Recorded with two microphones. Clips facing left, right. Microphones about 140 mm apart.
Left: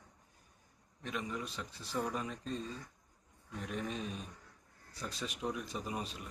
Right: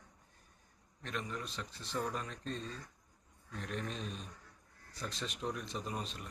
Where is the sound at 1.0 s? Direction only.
10° left (ahead or behind).